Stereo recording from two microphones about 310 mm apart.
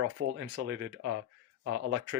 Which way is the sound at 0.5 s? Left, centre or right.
Right.